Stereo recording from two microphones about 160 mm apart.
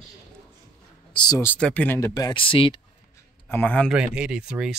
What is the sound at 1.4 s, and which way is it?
Speech, 10° left (ahead or behind).